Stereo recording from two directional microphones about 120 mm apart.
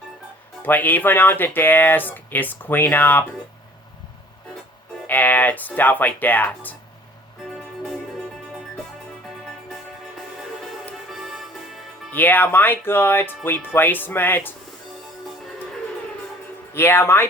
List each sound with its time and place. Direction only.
0.6 s speech: 15° left (ahead or behind)
5.0 s speech: 15° left (ahead or behind)
11.1 s music: centre (ahead or behind)
12.1 s speech: 15° left (ahead or behind)
16.7 s speech: 20° left (ahead or behind)